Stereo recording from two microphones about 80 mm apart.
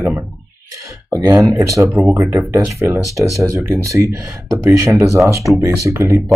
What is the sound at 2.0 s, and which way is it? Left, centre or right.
Speech, right.